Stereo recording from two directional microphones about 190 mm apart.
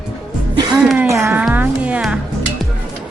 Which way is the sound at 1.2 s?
10° right (ahead or behind).